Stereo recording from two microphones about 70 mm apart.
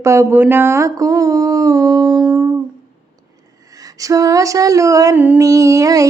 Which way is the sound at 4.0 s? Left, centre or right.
Right.